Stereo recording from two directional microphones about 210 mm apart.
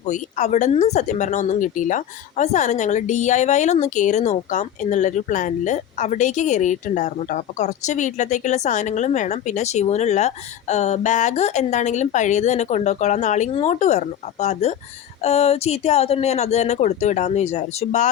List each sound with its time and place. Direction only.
0.0 s speech: 35° left (ahead or behind)